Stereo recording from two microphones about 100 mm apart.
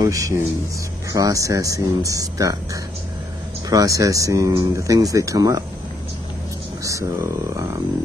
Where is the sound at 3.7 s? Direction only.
35° right (ahead or behind).